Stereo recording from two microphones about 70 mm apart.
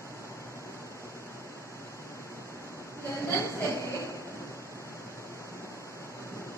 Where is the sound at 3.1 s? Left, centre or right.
Left.